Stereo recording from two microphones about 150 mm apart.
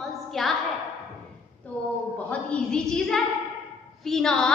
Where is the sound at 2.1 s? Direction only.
10° left (ahead or behind).